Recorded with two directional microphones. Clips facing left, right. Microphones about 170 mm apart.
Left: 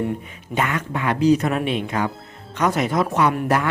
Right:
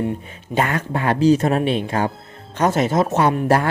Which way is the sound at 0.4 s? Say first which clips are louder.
Right 3 dB; 35° right (ahead or behind).